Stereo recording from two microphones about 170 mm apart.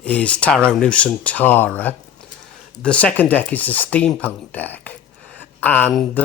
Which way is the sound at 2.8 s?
5° left (ahead or behind).